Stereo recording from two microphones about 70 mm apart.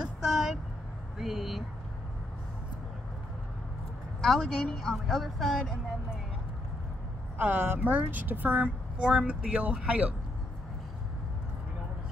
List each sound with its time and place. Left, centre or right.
0.2 s vehicle: centre
1.1 s a woman's voice: centre
4.2 s a woman's voice: centre
7.3 s a woman's voice: right
9.0 s speech: centre